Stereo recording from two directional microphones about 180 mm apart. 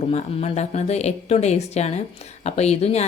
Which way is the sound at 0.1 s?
40° left (ahead or behind).